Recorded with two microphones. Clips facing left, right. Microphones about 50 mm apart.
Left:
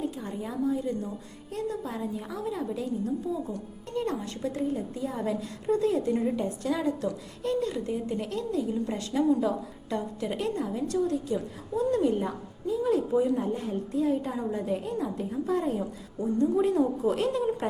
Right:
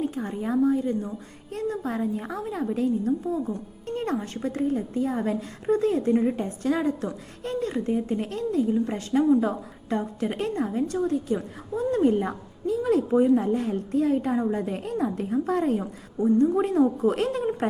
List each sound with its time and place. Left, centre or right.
0.0 s a woman's voice: right
12.2 s a woman's voice: right